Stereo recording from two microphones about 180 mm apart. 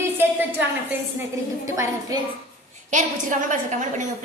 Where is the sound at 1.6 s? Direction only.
15° right (ahead or behind).